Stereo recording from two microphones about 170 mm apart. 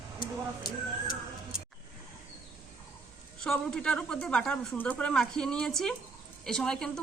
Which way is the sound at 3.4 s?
5° left (ahead or behind).